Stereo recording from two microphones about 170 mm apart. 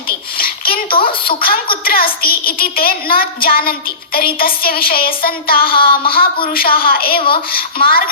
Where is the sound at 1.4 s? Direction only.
60° left (ahead or behind).